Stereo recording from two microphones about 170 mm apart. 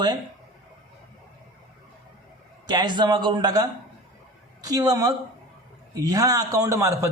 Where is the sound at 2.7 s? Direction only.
25° right (ahead or behind).